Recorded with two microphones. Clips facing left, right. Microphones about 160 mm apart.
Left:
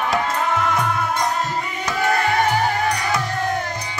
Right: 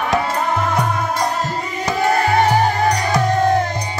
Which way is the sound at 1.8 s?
35° right (ahead or behind).